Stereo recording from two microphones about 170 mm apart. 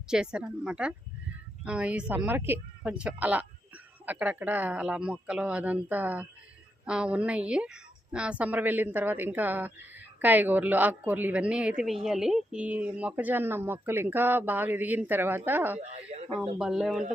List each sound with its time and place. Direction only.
0.1 s a woman's voice: 5° right (ahead or behind)